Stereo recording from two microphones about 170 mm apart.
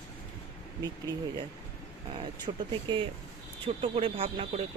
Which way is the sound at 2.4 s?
25° right (ahead or behind).